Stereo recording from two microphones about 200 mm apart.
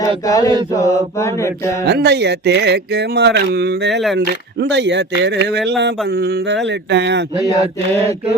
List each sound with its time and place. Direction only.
0.3 s mantra: 15° left (ahead or behind)
1.8 s speech: 55° right (ahead or behind)
7.5 s mantra: 30° right (ahead or behind)